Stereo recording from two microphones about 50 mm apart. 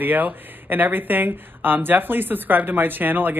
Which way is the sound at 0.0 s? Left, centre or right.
Right.